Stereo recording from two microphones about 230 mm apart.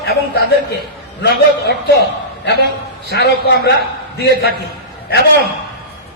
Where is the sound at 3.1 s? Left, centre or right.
Left.